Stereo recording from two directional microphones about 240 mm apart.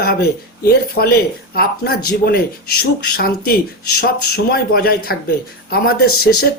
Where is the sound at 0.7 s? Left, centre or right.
Left.